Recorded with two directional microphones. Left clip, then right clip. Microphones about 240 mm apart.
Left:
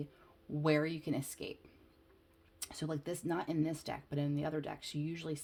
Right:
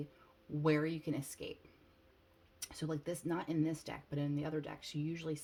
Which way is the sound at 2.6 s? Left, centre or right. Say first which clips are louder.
Left 1 dB; left.